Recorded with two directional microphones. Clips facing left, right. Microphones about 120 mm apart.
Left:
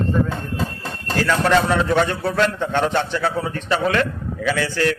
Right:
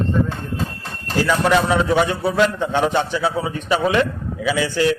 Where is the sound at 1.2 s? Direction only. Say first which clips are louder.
Even; 10° right (ahead or behind).